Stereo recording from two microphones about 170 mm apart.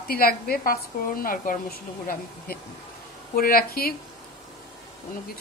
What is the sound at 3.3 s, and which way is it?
Speech, 60° left (ahead or behind).